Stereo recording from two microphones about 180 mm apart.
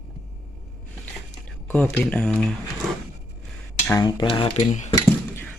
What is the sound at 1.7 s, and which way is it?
Speech, 10° left (ahead or behind).